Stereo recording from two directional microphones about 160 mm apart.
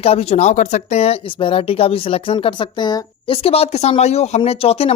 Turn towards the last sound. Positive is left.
turn(degrees=40)  # may be behind; listen again after turning